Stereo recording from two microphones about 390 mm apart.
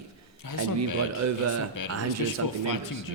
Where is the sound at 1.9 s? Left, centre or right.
Right.